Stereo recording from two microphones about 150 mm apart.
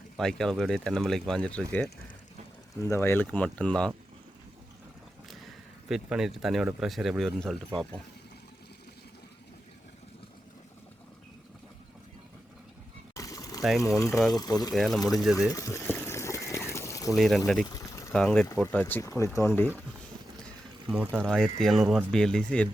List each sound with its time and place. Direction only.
0.2 s speech: 5° left (ahead or behind)
5.9 s speech: 5° right (ahead or behind)
13.1 s a sound: 25° left (ahead or behind)
13.6 s speech: centre (ahead or behind)
14.3 s speech: 25° left (ahead or behind)
14.8 s speech: centre (ahead or behind)
15.5 s a sound: 20° left (ahead or behind)
17.2 s speech: centre (ahead or behind)
17.7 s a sound: 20° left (ahead or behind)
18.1 s speech: 5° left (ahead or behind)
21.1 s speech: centre (ahead or behind)